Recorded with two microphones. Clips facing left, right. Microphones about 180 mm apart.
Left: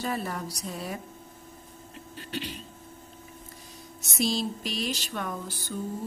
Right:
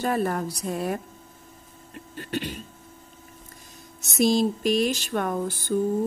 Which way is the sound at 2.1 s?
50° right (ahead or behind).